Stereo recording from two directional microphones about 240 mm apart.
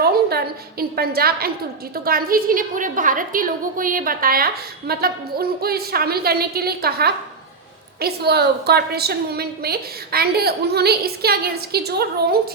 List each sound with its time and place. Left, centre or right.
0.0 s a woman's voice: right